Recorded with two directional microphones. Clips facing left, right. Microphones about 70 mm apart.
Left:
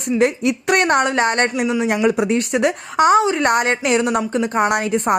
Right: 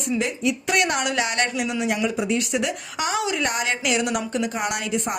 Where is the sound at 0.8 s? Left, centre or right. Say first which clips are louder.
Left 7 dB; left.